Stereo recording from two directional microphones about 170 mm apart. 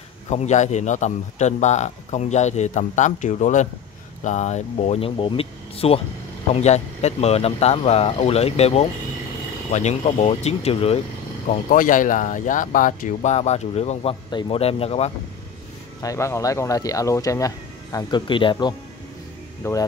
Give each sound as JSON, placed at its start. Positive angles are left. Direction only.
{"t": 0.3, "sound": "a man's voice", "side_deg": 40}
{"t": 11.7, "sound": "a man's voice", "side_deg": 50}
{"t": 16.0, "sound": "speech", "side_deg": 20}